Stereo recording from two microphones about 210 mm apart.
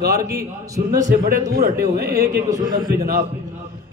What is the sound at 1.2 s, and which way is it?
Speech, 45° right (ahead or behind).